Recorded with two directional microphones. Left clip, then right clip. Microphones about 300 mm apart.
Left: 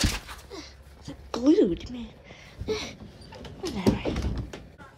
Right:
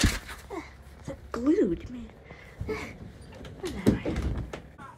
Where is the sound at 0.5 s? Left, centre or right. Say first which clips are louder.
Right 3 dB; centre.